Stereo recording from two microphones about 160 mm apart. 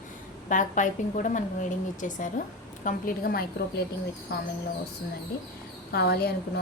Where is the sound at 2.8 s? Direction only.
70° left (ahead or behind).